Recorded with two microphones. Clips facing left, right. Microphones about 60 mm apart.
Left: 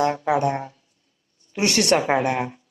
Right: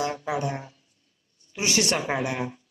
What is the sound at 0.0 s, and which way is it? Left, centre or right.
A woman's voice, left.